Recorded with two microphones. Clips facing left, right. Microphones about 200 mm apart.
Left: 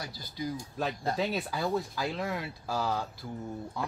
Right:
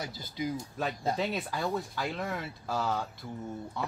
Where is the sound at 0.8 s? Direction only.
Centre (ahead or behind).